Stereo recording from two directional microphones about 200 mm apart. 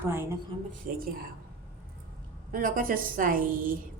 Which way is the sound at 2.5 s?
45° right (ahead or behind).